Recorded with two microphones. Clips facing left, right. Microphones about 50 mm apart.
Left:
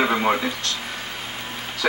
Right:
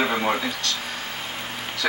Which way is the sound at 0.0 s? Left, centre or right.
Centre.